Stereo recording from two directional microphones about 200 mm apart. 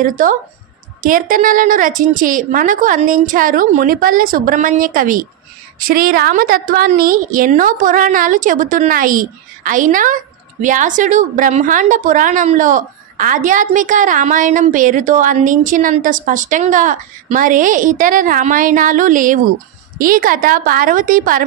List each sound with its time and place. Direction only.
0.0 s a woman's voice: 40° right (ahead or behind)